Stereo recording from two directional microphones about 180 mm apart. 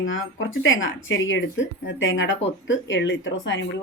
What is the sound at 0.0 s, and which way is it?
Speech, 90° left.